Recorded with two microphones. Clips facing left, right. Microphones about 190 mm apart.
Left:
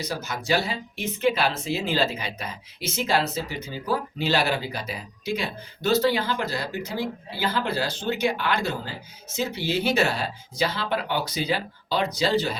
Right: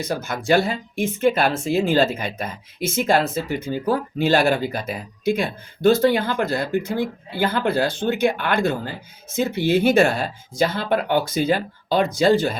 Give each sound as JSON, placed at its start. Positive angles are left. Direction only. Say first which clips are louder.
{"t": 0.0, "sound": "speech", "louder": "right 5 dB", "side_deg": -50}